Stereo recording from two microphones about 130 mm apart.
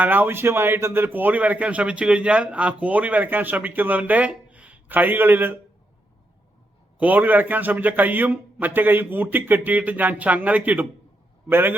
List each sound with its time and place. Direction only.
0.0 s a man's voice: 15° right (ahead or behind)
7.0 s a man's voice: 15° right (ahead or behind)